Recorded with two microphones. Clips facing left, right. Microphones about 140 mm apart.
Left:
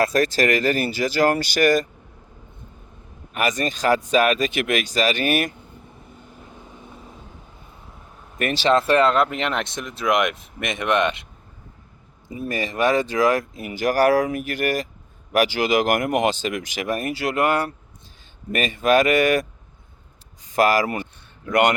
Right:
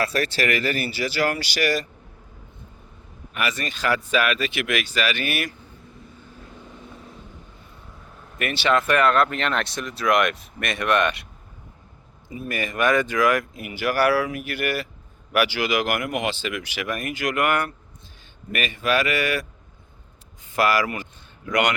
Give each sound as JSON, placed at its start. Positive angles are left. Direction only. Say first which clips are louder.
{"t": 0.0, "sound": "speech", "louder": "left 5 dB", "side_deg": 45}
{"t": 3.3, "sound": "speech", "louder": "left 5 dB", "side_deg": 40}
{"t": 8.4, "sound": "speech", "louder": "left 3 dB", "side_deg": 40}
{"t": 12.5, "sound": "speech", "louder": "left 1 dB", "side_deg": 30}
{"t": 21.5, "sound": "speech", "louder": "left 4 dB", "side_deg": 50}